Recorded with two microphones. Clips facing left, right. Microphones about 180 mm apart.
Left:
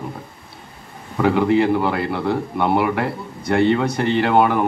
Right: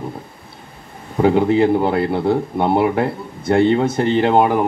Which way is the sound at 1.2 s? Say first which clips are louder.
Right 2 dB; 25° right (ahead or behind).